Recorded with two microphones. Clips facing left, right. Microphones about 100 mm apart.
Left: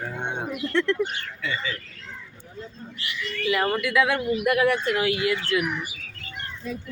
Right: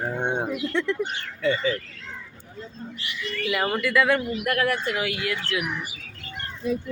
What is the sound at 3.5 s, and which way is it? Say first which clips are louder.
Speech: left 1 dB; 5° right (ahead or behind).